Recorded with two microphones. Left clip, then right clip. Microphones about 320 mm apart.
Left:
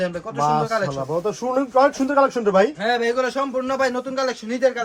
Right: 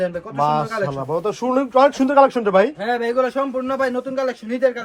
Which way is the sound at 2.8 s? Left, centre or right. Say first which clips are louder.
Right 1 dB; centre.